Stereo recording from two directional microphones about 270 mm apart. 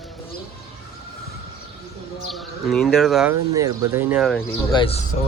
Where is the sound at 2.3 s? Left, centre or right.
Centre.